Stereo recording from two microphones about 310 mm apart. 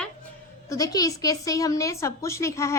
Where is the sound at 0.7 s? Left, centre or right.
Centre.